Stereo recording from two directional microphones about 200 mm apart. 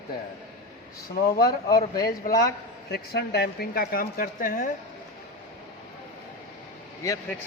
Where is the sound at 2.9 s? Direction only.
55° left (ahead or behind).